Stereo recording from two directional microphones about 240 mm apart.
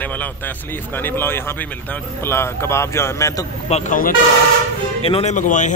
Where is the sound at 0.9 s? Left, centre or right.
Centre.